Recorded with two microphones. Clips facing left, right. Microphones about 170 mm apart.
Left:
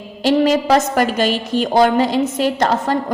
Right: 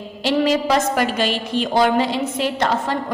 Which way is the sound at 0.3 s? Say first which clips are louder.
Left 4 dB; 45° left (ahead or behind).